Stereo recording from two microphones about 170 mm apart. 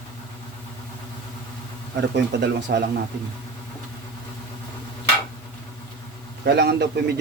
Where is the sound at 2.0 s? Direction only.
85° right.